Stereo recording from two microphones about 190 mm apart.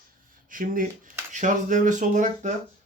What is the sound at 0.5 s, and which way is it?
Speech, 45° right (ahead or behind).